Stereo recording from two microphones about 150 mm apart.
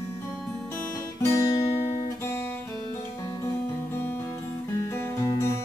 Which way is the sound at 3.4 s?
15° left (ahead or behind).